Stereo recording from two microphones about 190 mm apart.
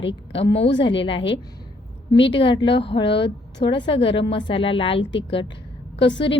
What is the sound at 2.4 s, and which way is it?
A woman's voice, 25° left (ahead or behind).